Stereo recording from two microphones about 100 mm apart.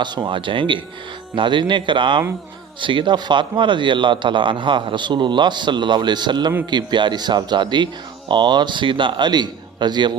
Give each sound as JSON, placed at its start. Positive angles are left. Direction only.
{"t": 0.0, "sound": "a man's voice", "side_deg": -50}